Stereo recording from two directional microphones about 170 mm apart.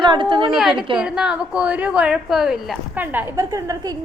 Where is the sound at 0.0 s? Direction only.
30° right (ahead or behind).